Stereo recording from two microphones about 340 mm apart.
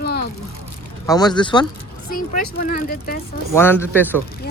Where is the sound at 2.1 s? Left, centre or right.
Left.